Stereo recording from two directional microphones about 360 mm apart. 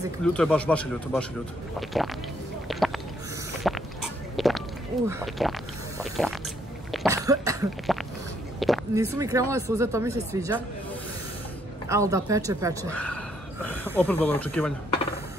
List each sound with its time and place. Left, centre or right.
0.2 s speech: centre
2.7 s a sound: centre
6.9 s cough: centre
8.5 s a sound: centre
9.1 s speech: centre
11.9 s speech: centre
12.9 s speech: centre
14.1 s speech: centre